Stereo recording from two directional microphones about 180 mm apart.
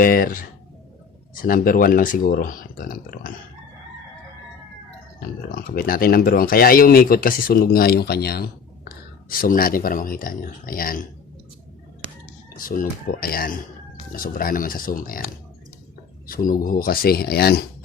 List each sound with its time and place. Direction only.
0.0 s speech: 55° left (ahead or behind)
1.4 s speech: 50° left (ahead or behind)
5.5 s speech: 50° left (ahead or behind)
12.5 s speech: 50° left (ahead or behind)